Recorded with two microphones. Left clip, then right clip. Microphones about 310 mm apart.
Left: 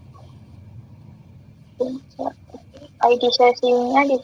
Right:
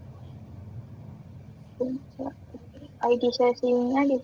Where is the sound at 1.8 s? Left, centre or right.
Left.